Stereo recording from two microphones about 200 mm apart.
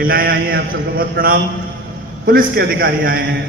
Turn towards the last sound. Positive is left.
turn(degrees=-45)  # may be behind; listen again after turning